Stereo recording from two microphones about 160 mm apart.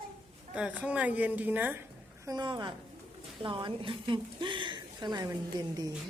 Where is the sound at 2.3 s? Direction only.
25° right (ahead or behind).